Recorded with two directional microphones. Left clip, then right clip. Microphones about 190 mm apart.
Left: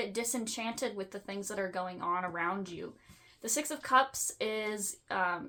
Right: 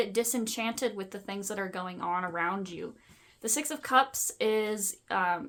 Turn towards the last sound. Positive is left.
turn(degrees=-40)  # may be behind; listen again after turning